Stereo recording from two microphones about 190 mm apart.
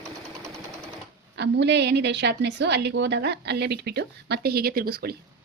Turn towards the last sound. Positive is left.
turn(degrees=-55)  # may be behind; listen again after turning